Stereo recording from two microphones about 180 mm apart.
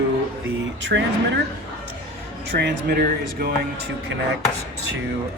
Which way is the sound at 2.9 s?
55° right (ahead or behind).